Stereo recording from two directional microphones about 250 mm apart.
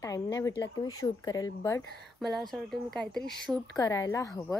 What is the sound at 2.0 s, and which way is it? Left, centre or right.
Speech, centre.